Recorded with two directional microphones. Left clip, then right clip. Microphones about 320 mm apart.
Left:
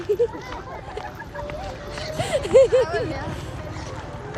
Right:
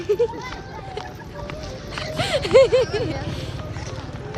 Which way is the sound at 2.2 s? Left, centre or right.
Centre.